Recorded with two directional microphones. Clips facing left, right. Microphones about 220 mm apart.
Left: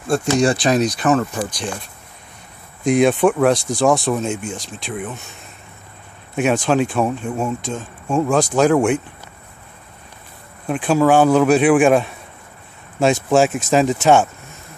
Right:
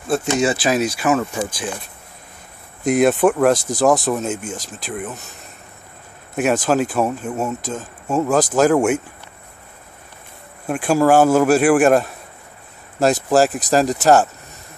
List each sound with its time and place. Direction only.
0.1 s speech: 5° right (ahead or behind)
2.8 s speech: 5° right (ahead or behind)
3.5 s speech: 20° right (ahead or behind)
4.1 s speech: 5° right (ahead or behind)
6.3 s speech: 5° right (ahead or behind)
10.7 s speech: 10° right (ahead or behind)